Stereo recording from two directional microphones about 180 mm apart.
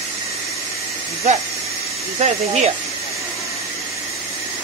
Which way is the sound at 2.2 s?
35° right (ahead or behind).